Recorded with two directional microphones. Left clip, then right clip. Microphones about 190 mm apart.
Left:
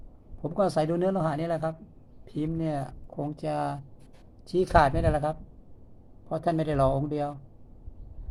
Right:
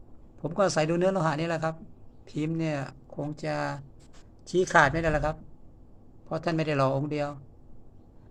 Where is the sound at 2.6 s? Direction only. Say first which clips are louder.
Even; centre (ahead or behind).